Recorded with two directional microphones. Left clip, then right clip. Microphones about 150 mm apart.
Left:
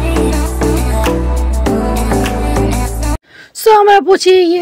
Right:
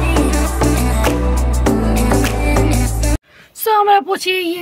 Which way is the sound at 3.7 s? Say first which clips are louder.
Left 6 dB; 40° left (ahead or behind).